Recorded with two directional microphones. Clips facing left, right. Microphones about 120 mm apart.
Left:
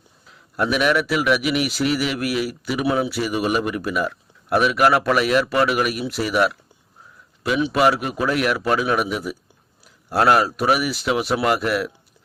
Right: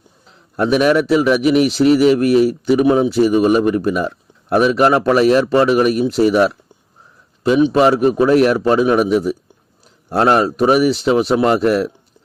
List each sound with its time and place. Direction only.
0.3 s a man's voice: 30° right (ahead or behind)